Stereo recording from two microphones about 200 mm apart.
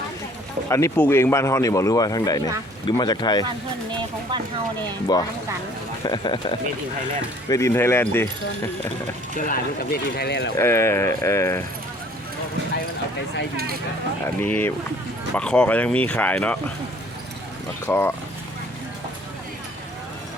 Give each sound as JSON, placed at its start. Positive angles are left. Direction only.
{"t": 0.7, "sound": "a man's voice", "side_deg": 15}
{"t": 5.1, "sound": "a man's voice", "side_deg": 20}
{"t": 9.4, "sound": "speech", "side_deg": 45}
{"t": 10.6, "sound": "a man's voice", "side_deg": 15}
{"t": 14.3, "sound": "a man's voice", "side_deg": 10}
{"t": 17.8, "sound": "a man's voice", "side_deg": 10}